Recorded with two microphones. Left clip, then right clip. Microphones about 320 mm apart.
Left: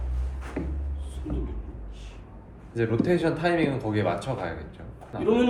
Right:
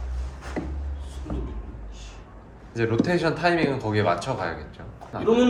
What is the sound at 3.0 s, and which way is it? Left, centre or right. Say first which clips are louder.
Speech: right 2 dB; right.